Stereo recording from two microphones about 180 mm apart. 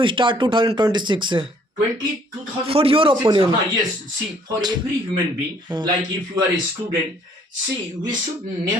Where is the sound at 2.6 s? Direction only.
30° right (ahead or behind).